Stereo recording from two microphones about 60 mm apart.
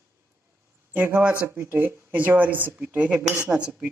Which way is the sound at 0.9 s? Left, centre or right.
Right.